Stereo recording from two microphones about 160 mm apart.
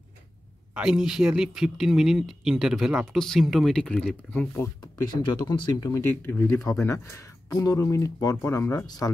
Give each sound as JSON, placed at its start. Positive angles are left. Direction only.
{"t": 0.7, "sound": "speech", "side_deg": -5}
{"t": 5.4, "sound": "speech", "side_deg": 25}